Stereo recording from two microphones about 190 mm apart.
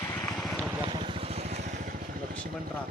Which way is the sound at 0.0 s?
15° left (ahead or behind).